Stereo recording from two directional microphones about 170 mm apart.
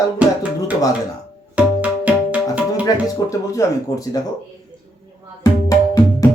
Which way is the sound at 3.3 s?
20° left (ahead or behind).